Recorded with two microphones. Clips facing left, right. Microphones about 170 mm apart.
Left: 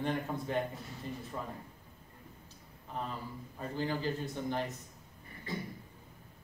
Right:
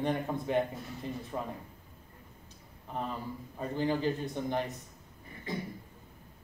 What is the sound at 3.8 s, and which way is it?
Speech, 15° right (ahead or behind).